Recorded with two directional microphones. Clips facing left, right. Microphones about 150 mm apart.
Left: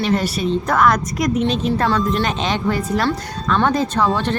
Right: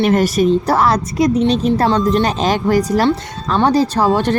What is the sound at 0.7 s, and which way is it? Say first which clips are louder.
A woman's voice: right 2 dB; 30° right (ahead or behind).